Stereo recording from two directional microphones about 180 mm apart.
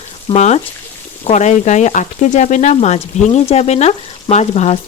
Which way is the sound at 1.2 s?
40° left (ahead or behind).